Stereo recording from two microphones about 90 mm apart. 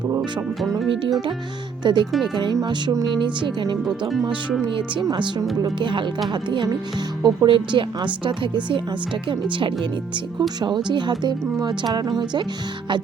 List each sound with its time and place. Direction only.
1.8 s speech: 55° right (ahead or behind)
2.1 s speech: centre (ahead or behind)
2.4 s speech: 50° right (ahead or behind); by 9.7 s 70° right (ahead or behind)
10.6 s speech: 55° right (ahead or behind)